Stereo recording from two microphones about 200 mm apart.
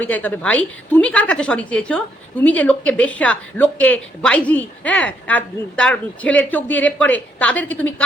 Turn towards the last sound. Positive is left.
turn(degrees=10)  # may be behind; listen again after turning